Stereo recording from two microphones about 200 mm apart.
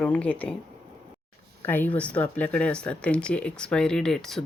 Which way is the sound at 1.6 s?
10° left (ahead or behind).